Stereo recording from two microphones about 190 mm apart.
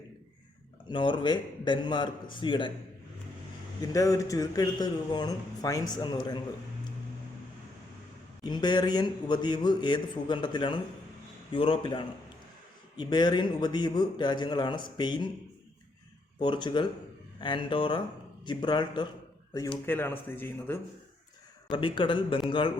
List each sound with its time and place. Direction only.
0.9 s speech: 25° left (ahead or behind)
3.9 s speech: 15° left (ahead or behind)
8.4 s speech: 20° left (ahead or behind)
16.4 s speech: 25° left (ahead or behind)
21.7 s speech: 25° left (ahead or behind)